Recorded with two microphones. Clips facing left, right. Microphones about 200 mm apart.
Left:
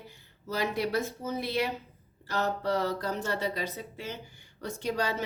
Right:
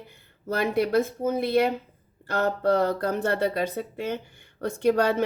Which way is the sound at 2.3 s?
55° right (ahead or behind).